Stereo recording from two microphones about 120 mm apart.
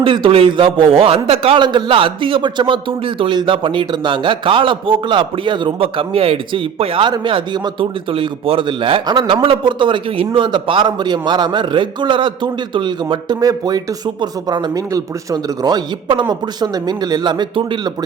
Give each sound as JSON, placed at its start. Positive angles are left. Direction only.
{"t": 0.0, "sound": "a man's voice", "side_deg": -50}